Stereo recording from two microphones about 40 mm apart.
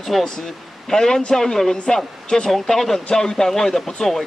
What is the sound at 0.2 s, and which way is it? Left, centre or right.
A man's voice, centre.